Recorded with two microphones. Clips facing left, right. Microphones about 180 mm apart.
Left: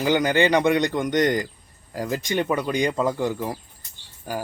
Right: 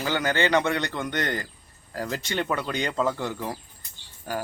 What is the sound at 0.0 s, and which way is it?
Speech, 15° left (ahead or behind).